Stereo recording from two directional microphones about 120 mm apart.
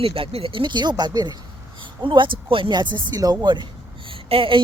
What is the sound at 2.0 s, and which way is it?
Speech, 45° right (ahead or behind).